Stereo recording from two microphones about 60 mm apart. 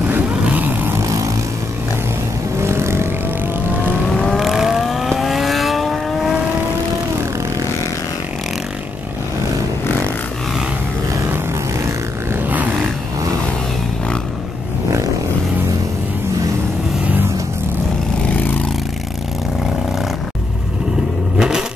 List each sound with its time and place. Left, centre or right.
0.1 s vehicle: right
1.0 s vehicle: right
2.6 s vehicle: right
4.4 s vehicle: centre
12.4 s a sound: right
17.0 s vehicle: right
21.4 s vehicle: centre